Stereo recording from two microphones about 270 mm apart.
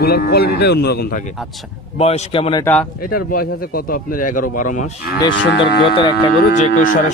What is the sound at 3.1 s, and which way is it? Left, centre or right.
Speech, left.